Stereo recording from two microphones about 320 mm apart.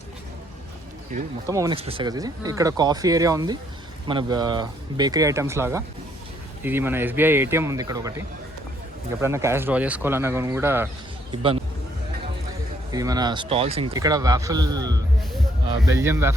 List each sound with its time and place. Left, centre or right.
1.5 s speech: centre
9.2 s speech: centre
12.9 s speech: centre